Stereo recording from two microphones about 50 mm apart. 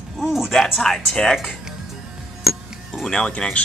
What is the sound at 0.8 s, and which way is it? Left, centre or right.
Speech, centre.